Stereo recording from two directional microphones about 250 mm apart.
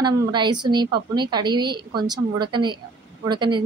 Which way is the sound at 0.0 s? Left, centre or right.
Centre.